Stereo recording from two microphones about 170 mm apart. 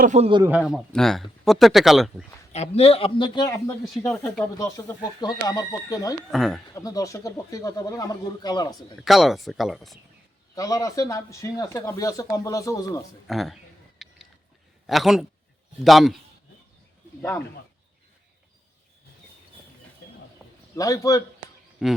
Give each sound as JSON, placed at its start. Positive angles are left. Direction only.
{"t": 0.0, "sound": "a man's voice", "side_deg": -45}
{"t": 0.4, "sound": "speech", "side_deg": -5}
{"t": 2.5, "sound": "speech", "side_deg": 40}
{"t": 3.9, "sound": "speech", "side_deg": 5}
{"t": 4.2, "sound": "speech", "side_deg": 15}
{"t": 6.3, "sound": "speech", "side_deg": 0}
{"t": 6.7, "sound": "speech", "side_deg": 20}
{"t": 9.0, "sound": "speech", "side_deg": 0}
{"t": 10.5, "sound": "speech", "side_deg": 20}
{"t": 13.2, "sound": "speech", "side_deg": 0}
{"t": 14.0, "sound": "biting", "side_deg": 0}
{"t": 14.8, "sound": "speech", "side_deg": 0}
{"t": 20.7, "sound": "speech", "side_deg": 20}
{"t": 21.8, "sound": "speech", "side_deg": 0}